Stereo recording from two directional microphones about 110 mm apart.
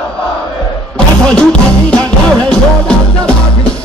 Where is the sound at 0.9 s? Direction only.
10° left (ahead or behind).